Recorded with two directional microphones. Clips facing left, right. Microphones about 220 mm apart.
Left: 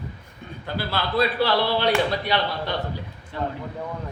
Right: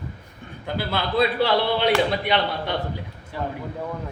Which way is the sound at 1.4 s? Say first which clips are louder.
Right 1 dB; 20° right (ahead or behind).